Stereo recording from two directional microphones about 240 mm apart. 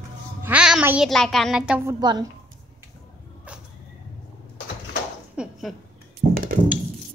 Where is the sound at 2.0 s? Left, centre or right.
Centre.